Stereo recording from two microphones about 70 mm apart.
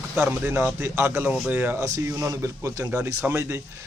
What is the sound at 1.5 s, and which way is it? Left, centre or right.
Speech, right.